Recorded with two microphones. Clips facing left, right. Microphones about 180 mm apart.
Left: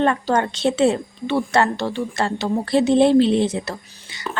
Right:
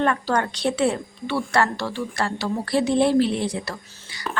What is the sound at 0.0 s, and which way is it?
A woman's voice, 25° left (ahead or behind).